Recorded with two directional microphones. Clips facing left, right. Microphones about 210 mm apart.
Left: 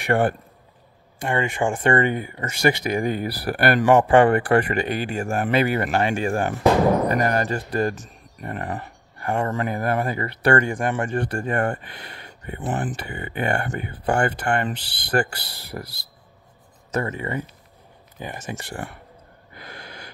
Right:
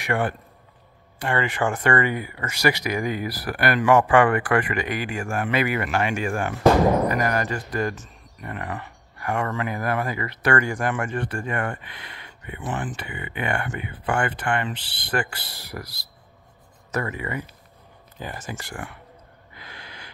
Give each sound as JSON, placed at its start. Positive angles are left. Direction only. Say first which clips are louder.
{"t": 1.3, "sound": "speech", "louder": "left 1 dB", "side_deg": 25}
{"t": 15.7, "sound": "speech", "louder": "left 3 dB", "side_deg": 30}
{"t": 18.2, "sound": "speech", "louder": "left 2 dB", "side_deg": 20}
{"t": 19.5, "sound": "a sound", "louder": "left 4 dB", "side_deg": 45}